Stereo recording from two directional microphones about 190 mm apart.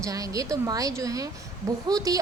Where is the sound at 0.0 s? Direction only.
20° right (ahead or behind).